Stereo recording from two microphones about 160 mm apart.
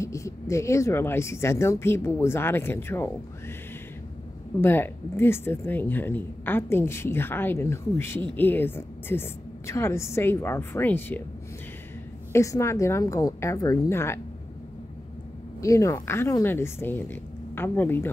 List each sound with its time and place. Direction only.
0.0 s a woman's voice: 20° left (ahead or behind)
4.6 s a woman's voice: 15° left (ahead or behind)
12.3 s a woman's voice: 20° left (ahead or behind)
15.6 s a woman's voice: 20° left (ahead or behind)